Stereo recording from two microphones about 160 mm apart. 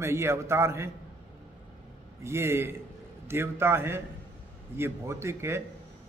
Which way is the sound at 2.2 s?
15° right (ahead or behind).